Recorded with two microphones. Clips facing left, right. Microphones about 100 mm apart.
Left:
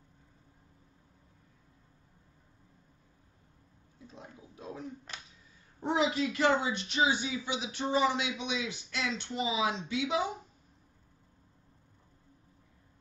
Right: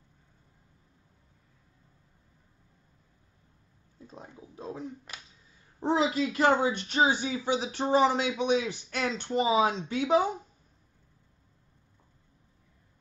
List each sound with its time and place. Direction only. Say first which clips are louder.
4.1 s speech: right 3 dB; 35° right (ahead or behind)
5.1 s finger snapping: even; 10° right (ahead or behind)
5.8 s speech: right 3 dB; 35° right (ahead or behind)